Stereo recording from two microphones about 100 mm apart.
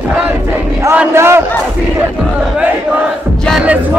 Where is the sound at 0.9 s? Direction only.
20° right (ahead or behind).